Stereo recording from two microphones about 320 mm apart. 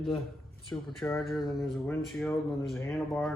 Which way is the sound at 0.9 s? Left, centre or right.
Centre.